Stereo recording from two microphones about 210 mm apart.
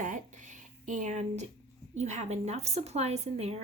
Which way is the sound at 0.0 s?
35° right (ahead or behind).